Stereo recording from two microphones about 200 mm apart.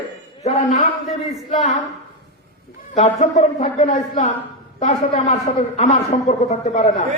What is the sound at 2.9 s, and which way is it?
A man's voice, 35° left (ahead or behind).